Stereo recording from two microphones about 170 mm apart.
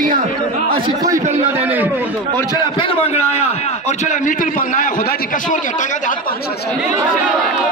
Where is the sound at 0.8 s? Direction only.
20° right (ahead or behind).